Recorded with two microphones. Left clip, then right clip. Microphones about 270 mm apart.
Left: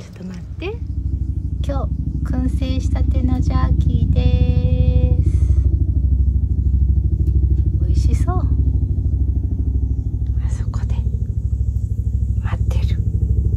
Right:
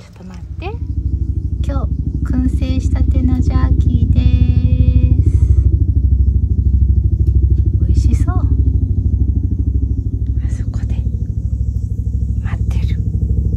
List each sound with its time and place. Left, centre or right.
1.7 s vehicle: centre
7.8 s vehicle: centre